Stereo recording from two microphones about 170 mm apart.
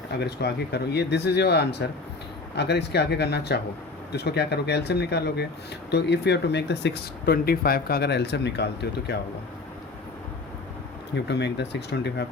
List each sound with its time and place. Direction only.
0.2 s speech: 75° left (ahead or behind)
11.1 s speech: 90° left